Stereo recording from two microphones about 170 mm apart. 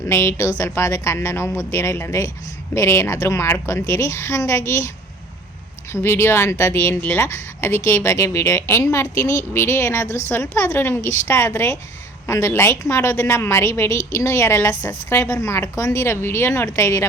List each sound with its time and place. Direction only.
0.1 s a woman's voice: 15° left (ahead or behind)
5.9 s a woman's voice: 15° left (ahead or behind)